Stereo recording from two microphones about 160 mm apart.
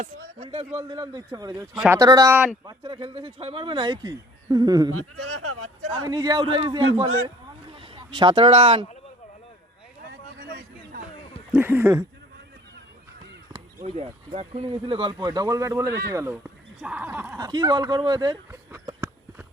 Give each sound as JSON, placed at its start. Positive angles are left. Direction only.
{"t": 0.3, "sound": "speech", "side_deg": -35}
{"t": 11.5, "sound": "speech", "side_deg": -10}
{"t": 13.8, "sound": "speech", "side_deg": -40}
{"t": 17.4, "sound": "speech", "side_deg": -25}